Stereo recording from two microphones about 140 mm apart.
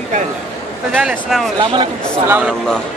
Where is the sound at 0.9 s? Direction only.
15° right (ahead or behind).